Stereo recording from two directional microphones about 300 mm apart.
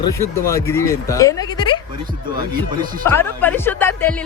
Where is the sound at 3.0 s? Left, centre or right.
Centre.